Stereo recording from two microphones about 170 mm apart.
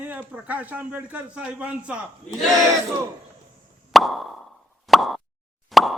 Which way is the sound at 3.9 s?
Centre (ahead or behind).